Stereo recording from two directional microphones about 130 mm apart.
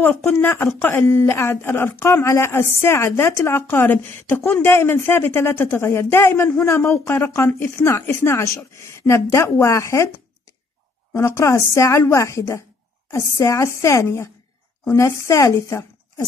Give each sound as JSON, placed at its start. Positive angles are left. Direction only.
{"t": 0.0, "sound": "speech", "side_deg": 15}
{"t": 11.1, "sound": "a woman's voice", "side_deg": 20}